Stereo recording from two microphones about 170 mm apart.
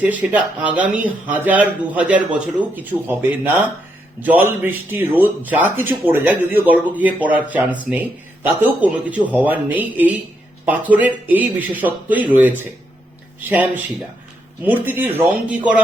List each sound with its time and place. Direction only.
0.0 s speech: 10° right (ahead or behind)